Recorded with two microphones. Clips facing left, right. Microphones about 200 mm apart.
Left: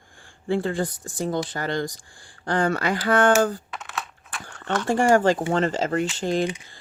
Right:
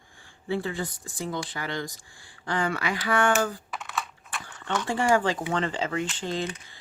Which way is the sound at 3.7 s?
Centre (ahead or behind).